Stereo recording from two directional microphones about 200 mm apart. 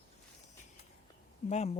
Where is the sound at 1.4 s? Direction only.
35° left (ahead or behind).